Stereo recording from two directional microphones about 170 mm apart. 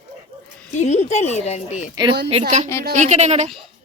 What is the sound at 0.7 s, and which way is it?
Speech, 40° left (ahead or behind).